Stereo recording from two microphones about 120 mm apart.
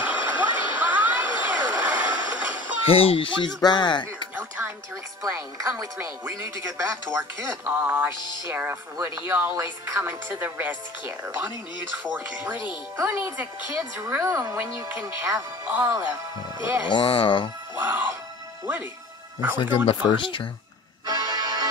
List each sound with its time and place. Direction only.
0.0 s a sound: 15° right (ahead or behind)
2.8 s speech: 50° left (ahead or behind)
4.4 s music: 20° right (ahead or behind)
5.2 s speech: 25° right (ahead or behind)
13.0 s speech: 15° right (ahead or behind)
16.8 s speech: 45° left (ahead or behind)
17.7 s speech: 15° right (ahead or behind)
19.6 s speech: 45° left (ahead or behind)
21.0 s music: 30° right (ahead or behind)